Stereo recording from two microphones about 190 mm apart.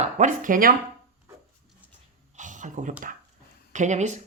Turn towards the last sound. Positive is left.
turn(degrees=-40)  # may be behind; listen again after turning